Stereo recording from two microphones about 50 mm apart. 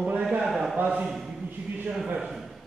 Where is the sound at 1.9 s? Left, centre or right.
Centre.